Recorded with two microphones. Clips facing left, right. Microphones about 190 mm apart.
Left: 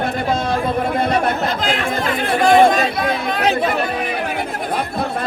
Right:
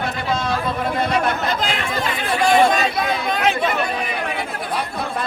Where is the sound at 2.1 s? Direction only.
50° left (ahead or behind).